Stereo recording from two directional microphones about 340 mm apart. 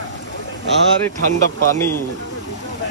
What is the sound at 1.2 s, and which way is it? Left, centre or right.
Speech, left.